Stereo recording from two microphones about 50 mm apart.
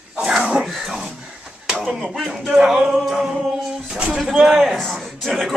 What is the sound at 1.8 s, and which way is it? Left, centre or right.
Speech, centre.